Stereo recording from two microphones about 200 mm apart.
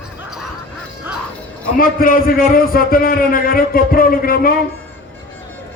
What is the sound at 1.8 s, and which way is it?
A man's voice, 45° left (ahead or behind).